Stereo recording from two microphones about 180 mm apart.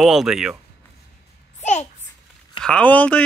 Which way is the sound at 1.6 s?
40° left (ahead or behind).